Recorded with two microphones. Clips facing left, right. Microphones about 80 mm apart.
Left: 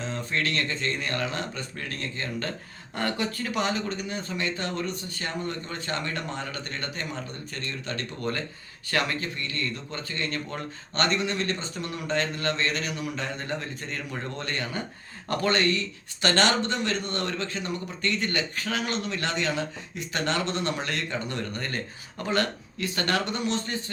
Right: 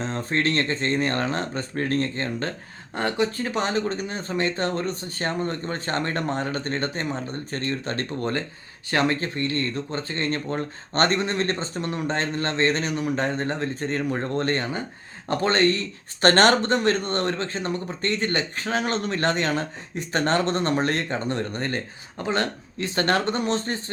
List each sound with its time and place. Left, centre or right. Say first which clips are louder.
0.0 s speech: right 5 dB; right
2.9 s speech: right 5 dB; right